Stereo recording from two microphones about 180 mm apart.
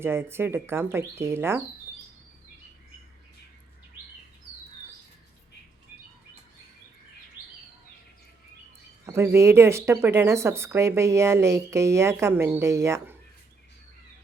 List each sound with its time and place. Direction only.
0.0 s speech: 15° right (ahead or behind)
9.0 s speech: 15° right (ahead or behind)